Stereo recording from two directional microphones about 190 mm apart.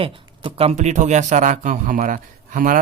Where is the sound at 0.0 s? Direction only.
30° right (ahead or behind).